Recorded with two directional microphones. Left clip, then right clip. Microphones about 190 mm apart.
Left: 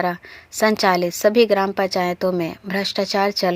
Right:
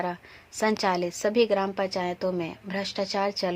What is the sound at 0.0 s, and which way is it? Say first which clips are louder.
A woman's voice: left 9 dB; 25° left (ahead or behind).